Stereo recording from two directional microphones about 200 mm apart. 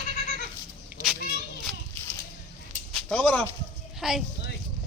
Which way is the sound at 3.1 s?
5° left (ahead or behind).